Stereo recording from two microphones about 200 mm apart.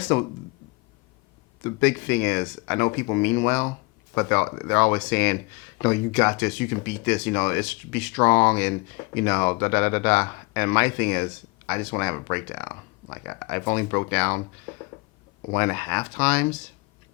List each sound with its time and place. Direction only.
0.0 s speech: 10° left (ahead or behind)
1.6 s speech: 10° left (ahead or behind)
15.5 s speech: 10° left (ahead or behind)